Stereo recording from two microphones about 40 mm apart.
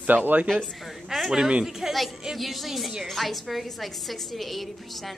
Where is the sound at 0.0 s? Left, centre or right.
Right.